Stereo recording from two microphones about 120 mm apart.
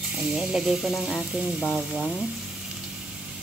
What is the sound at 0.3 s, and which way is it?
Speech, 5° right (ahead or behind).